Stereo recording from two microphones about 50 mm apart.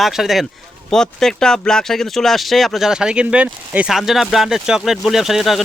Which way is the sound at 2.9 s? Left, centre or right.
Centre.